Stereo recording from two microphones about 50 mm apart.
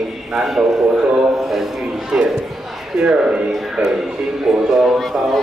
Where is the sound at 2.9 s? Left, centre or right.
Centre.